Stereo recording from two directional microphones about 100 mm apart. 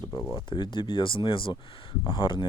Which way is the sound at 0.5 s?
50° left (ahead or behind).